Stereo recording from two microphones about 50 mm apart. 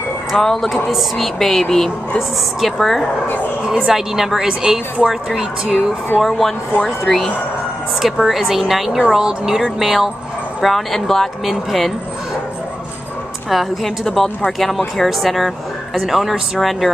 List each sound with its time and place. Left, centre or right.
0.4 s speech: centre
3.6 s a woman's voice: centre
6.1 s speech: centre
8.0 s a woman's voice: centre
10.6 s speech: centre
13.5 s speech: centre